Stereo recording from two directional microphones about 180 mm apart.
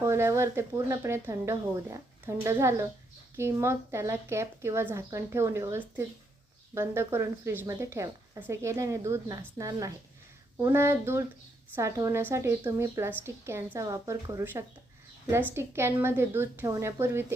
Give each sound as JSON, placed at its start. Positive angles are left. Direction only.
{"t": 0.0, "sound": "speech", "side_deg": -15}